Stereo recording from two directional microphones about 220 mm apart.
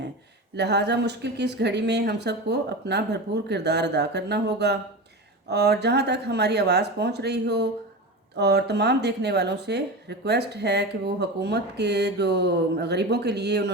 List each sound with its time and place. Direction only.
0.5 s speech: 50° right (ahead or behind)